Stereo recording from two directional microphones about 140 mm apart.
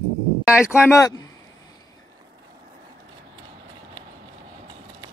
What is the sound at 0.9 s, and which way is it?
Speech, 25° left (ahead or behind).